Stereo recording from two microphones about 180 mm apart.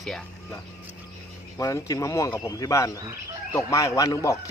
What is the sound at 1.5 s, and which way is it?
A man's voice, 20° left (ahead or behind).